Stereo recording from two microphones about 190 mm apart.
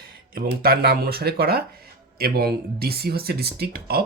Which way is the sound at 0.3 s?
50° right (ahead or behind).